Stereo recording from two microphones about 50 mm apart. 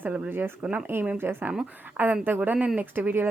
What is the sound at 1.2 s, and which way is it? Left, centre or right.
Speech, right.